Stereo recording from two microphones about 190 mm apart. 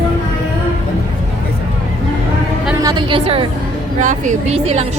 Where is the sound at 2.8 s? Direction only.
25° right (ahead or behind).